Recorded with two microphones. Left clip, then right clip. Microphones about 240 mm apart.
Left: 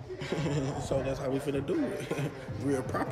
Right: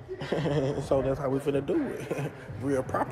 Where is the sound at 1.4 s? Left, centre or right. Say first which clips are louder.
Right 4 dB; centre.